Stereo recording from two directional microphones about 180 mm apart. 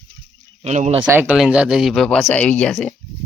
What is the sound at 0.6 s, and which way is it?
Speech, 40° right (ahead or behind).